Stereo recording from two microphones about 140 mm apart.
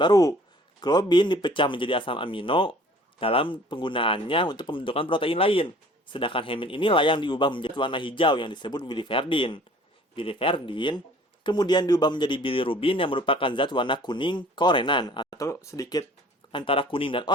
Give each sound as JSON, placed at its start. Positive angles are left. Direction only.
{"t": 0.0, "sound": "speech", "side_deg": 25}
{"t": 16.5, "sound": "speech", "side_deg": 40}